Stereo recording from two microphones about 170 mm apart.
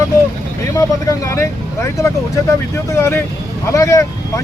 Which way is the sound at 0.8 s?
15° left (ahead or behind).